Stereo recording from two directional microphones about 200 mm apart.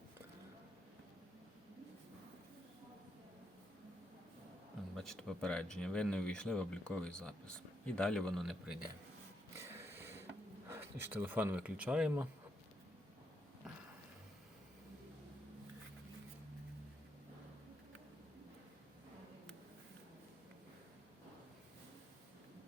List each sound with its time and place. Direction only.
4.9 s speech: centre (ahead or behind)
9.6 s a sound: 10° right (ahead or behind)
10.7 s speech: 10° right (ahead or behind)